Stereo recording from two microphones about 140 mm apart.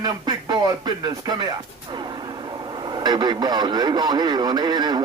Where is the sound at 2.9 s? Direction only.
30° right (ahead or behind).